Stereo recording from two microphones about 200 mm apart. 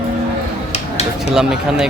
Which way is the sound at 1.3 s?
5° right (ahead or behind).